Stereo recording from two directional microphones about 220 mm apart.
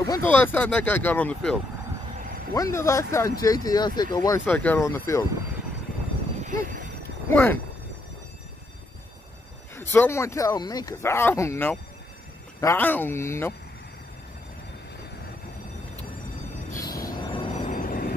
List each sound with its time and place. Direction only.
0.0 s speech: 15° left (ahead or behind)
6.4 s a sound: 40° right (ahead or behind)
7.0 s a sound: 10° left (ahead or behind)
9.8 s speech: 10° left (ahead or behind)
16.7 s music: 15° left (ahead or behind)
17.6 s train: 35° left (ahead or behind)